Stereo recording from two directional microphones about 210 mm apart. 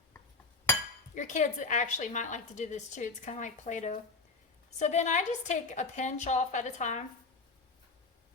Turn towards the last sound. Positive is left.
turn(degrees=35)  # may be behind; listen again after turning